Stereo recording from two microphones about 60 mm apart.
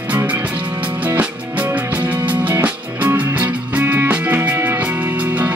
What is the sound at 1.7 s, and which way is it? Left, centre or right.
Music, right.